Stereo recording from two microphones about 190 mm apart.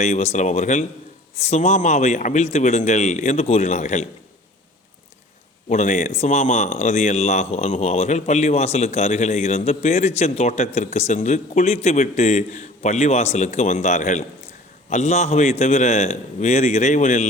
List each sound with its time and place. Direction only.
0.0 s speech: 35° left (ahead or behind)
5.6 s speech: 40° left (ahead or behind)